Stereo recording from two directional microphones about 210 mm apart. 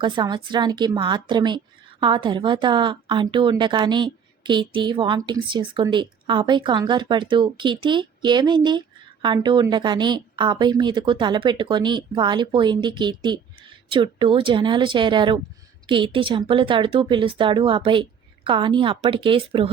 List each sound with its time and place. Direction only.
0.0 s a woman's voice: 20° right (ahead or behind)